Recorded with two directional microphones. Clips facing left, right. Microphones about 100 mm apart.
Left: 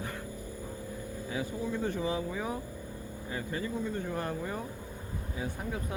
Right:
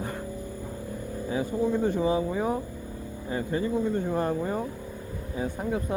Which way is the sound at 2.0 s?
30° right (ahead or behind).